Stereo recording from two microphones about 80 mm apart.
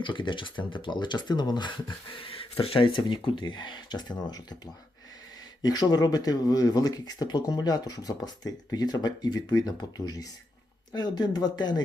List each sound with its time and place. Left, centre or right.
0.0 s speech: left
2.7 s speech: left